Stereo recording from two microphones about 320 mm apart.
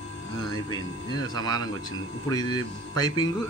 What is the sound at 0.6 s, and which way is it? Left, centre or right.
Speech, centre.